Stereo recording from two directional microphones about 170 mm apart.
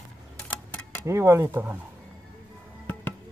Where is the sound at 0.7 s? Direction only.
10° left (ahead or behind).